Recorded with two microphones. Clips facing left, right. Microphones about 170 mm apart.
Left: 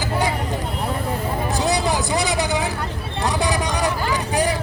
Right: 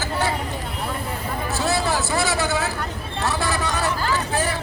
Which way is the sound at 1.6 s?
15° left (ahead or behind).